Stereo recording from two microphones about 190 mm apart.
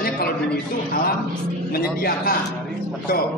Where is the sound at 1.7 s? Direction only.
50° left (ahead or behind).